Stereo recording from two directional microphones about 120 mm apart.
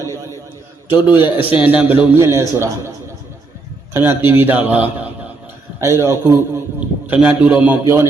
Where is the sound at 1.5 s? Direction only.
10° right (ahead or behind).